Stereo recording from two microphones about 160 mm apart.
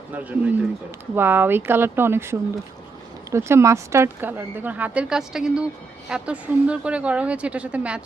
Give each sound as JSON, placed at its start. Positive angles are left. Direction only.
{"t": 0.1, "sound": "speech", "side_deg": -10}